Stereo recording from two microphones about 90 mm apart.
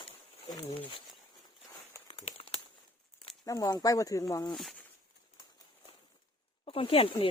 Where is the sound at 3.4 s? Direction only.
40° left (ahead or behind).